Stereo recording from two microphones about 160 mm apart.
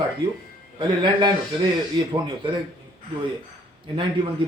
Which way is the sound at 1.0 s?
30° right (ahead or behind).